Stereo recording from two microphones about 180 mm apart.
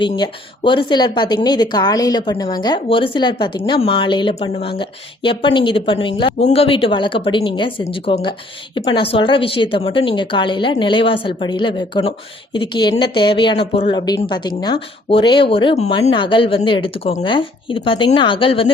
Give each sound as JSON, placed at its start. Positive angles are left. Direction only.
{"t": 0.0, "sound": "speech", "side_deg": 25}